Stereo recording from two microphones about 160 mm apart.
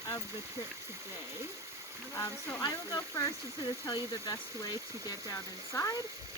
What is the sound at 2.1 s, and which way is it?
Speech, 20° left (ahead or behind).